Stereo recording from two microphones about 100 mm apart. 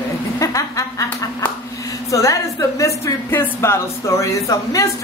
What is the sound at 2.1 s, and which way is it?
A woman's voice, 35° left (ahead or behind).